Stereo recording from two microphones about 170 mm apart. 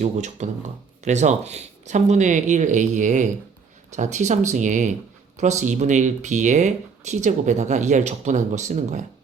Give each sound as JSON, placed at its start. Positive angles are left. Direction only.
{"t": 0.0, "sound": "speech", "side_deg": -45}